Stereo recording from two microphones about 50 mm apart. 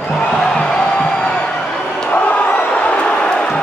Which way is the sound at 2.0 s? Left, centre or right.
Left.